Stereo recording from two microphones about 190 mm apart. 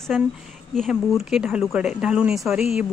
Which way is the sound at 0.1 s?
Centre (ahead or behind).